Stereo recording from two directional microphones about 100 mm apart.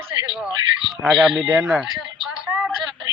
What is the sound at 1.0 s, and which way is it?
Speech, centre (ahead or behind).